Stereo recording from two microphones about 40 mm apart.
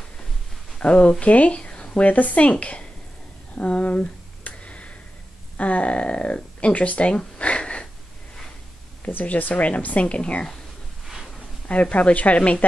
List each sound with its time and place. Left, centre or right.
0.7 s speech: left
2.0 s a woman's voice: left
3.5 s a sound: left
5.6 s speech: left
7.3 s a sound: left
9.0 s speech: left